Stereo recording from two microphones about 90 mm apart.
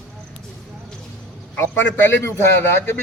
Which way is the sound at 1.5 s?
25° left (ahead or behind).